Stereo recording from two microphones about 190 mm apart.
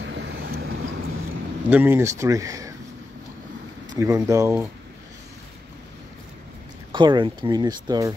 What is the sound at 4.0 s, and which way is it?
Speech, 15° right (ahead or behind).